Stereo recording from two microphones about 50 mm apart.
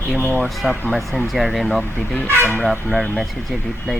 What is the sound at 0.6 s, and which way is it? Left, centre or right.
Speech, centre.